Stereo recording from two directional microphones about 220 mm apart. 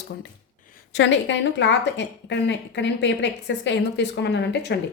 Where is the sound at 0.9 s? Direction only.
55° left (ahead or behind).